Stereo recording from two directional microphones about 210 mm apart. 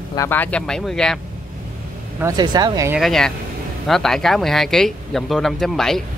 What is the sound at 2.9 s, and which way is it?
Speech, centre (ahead or behind).